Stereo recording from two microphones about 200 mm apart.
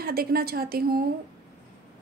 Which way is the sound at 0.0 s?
50° right (ahead or behind).